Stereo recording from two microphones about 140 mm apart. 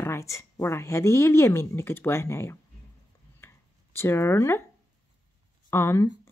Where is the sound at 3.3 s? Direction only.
15° left (ahead or behind).